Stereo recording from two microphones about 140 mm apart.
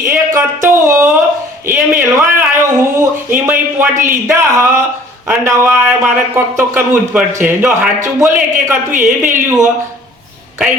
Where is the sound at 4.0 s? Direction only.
15° right (ahead or behind).